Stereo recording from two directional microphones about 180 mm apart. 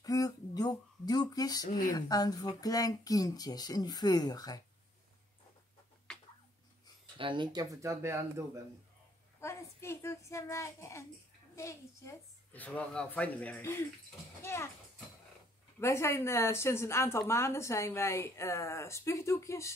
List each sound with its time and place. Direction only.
0.0 s a sound: 20° left (ahead or behind)
1.8 s speech: 20° left (ahead or behind)
6.1 s a sound: 5° left (ahead or behind)
7.2 s speech: 25° right (ahead or behind)
9.4 s speech: 15° left (ahead or behind)
15.8 s speech: 15° left (ahead or behind)